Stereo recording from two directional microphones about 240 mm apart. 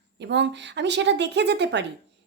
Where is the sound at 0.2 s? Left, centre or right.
Right.